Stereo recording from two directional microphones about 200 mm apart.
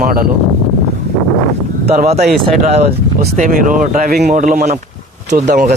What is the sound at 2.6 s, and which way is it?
Speech, 30° right (ahead or behind).